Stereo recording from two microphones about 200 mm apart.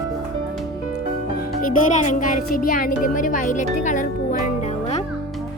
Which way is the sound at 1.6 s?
40° left (ahead or behind).